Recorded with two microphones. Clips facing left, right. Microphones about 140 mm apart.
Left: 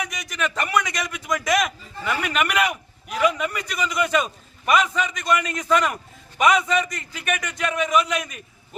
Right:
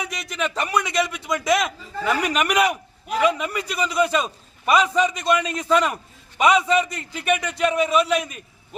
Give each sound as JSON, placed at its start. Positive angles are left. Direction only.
{"t": 0.0, "sound": "a man's voice", "side_deg": -30}